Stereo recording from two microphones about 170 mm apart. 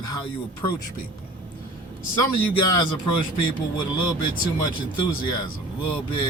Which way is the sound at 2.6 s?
25° left (ahead or behind).